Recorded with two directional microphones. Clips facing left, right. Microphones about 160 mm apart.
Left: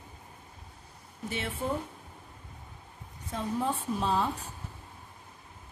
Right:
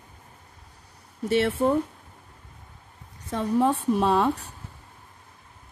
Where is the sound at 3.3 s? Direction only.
70° right (ahead or behind).